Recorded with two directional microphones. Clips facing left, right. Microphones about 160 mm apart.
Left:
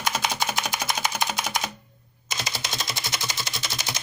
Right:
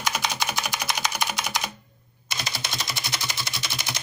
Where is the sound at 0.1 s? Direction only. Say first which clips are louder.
Left 1 dB; 30° left (ahead or behind).